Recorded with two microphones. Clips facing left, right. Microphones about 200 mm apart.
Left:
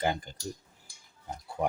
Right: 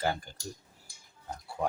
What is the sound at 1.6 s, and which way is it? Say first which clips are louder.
Speech: left 2 dB; 20° left (ahead or behind).